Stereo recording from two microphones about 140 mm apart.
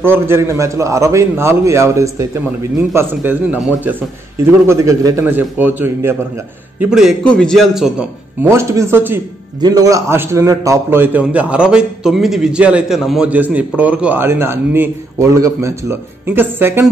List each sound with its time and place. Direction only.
0.0 s a man's voice: 15° right (ahead or behind)
3.5 s a man's voice: centre (ahead or behind)
4.5 s a man's voice: 20° right (ahead or behind)
6.9 s a man's voice: 5° right (ahead or behind)
8.4 s a man's voice: 20° right (ahead or behind)
9.6 s a man's voice: 25° right (ahead or behind)